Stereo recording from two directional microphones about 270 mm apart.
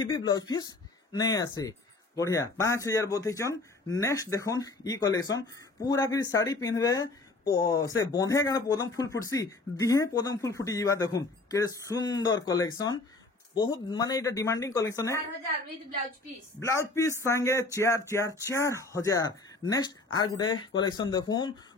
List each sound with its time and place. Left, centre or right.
0.0 s speech: centre
16.5 s speech: centre